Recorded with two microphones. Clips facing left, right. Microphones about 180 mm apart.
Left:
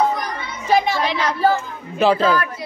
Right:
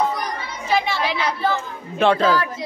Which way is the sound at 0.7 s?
40° left (ahead or behind).